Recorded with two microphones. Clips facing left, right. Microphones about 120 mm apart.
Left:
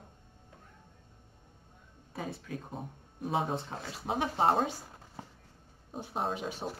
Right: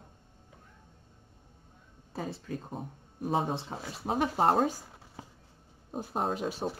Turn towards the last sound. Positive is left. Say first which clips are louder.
# right 3 dB
turn(degrees=-40)  # may be behind; listen again after turning